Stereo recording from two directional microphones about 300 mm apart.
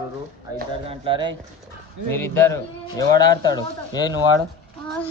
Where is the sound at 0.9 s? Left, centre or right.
Centre.